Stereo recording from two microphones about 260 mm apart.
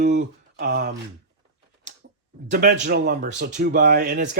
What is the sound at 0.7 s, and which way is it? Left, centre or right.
Speech, right.